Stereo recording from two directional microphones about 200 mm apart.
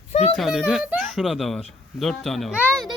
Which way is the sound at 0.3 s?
Centre (ahead or behind).